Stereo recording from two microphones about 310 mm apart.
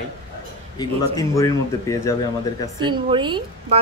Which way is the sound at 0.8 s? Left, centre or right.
Centre.